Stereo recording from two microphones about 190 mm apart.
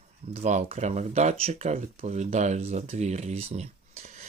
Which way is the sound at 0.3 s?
35° right (ahead or behind).